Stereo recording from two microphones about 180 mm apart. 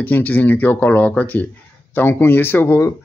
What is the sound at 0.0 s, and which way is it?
Speech, 10° left (ahead or behind).